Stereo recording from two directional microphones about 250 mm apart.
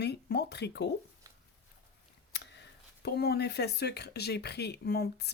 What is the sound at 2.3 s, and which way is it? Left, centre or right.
Speech, left.